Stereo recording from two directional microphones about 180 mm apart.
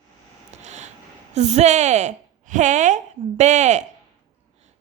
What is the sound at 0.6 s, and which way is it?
A woman's voice, 40° right (ahead or behind).